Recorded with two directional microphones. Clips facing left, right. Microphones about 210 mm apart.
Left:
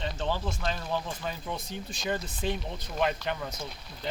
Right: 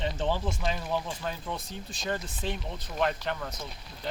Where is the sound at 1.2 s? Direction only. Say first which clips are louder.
Even; 5° left (ahead or behind).